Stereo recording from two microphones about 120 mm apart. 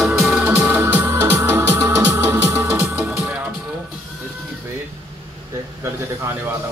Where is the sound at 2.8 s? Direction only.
15° right (ahead or behind).